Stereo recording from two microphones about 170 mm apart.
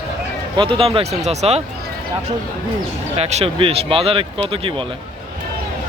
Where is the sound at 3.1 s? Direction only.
35° right (ahead or behind).